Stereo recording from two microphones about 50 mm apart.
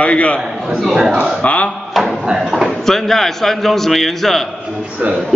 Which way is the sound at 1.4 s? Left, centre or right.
Left.